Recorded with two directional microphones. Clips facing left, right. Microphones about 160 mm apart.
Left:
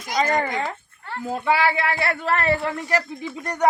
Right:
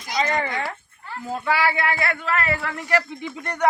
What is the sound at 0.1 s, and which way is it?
Speech, 45° left (ahead or behind).